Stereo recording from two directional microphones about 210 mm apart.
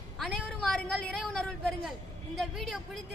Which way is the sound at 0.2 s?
5° left (ahead or behind).